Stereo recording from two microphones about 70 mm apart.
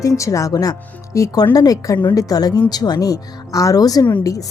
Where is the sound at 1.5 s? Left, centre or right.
Left.